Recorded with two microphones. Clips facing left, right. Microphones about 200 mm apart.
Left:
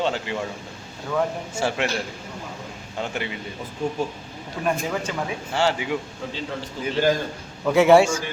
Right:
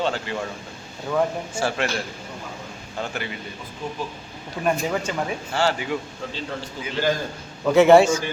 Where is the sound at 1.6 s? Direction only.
20° left (ahead or behind).